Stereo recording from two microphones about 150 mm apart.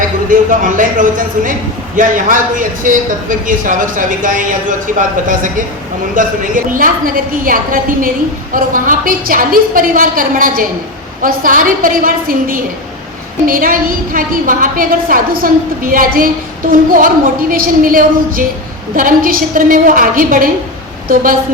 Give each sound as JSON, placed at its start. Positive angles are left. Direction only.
{"t": 0.3, "sound": "a man's voice", "side_deg": -65}